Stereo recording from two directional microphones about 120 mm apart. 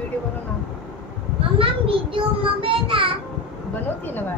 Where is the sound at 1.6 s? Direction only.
50° right (ahead or behind).